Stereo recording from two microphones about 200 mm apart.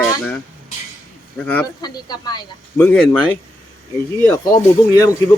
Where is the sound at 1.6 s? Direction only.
20° left (ahead or behind); by 3.2 s 5° left (ahead or behind).